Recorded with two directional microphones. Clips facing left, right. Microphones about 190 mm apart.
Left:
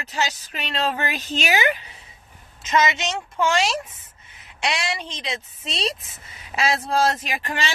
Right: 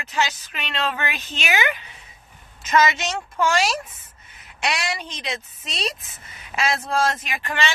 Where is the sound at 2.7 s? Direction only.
20° left (ahead or behind).